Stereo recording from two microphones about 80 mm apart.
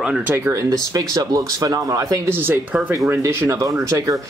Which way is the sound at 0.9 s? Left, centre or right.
Right.